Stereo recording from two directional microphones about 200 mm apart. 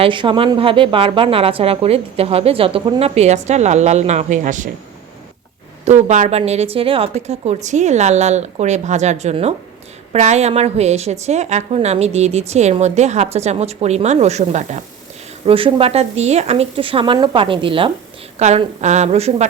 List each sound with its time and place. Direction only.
0.0 s speech: 25° right (ahead or behind)
5.8 s a woman's voice: 35° right (ahead or behind)